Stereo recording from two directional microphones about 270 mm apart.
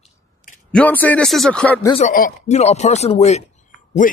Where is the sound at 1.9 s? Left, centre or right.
Left.